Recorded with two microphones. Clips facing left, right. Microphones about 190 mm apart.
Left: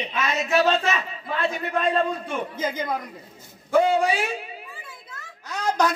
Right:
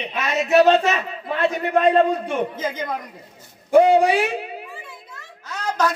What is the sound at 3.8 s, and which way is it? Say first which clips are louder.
Speech: right 6 dB; 65° right (ahead or behind).